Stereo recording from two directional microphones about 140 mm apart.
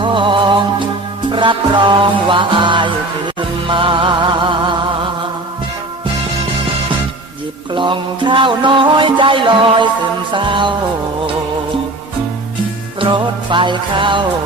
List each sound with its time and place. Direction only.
0.0 s music: 35° right (ahead or behind)
7.7 s music: 35° right (ahead or behind)
13.0 s music: 35° right (ahead or behind)